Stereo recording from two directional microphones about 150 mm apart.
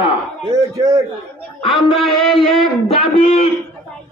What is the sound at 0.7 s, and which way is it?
Speech, 20° right (ahead or behind).